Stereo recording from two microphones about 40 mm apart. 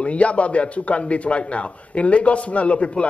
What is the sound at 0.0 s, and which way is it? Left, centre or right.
Speech, left.